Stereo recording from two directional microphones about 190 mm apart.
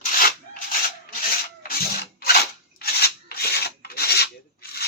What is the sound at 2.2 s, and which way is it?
Filing, 55° left (ahead or behind).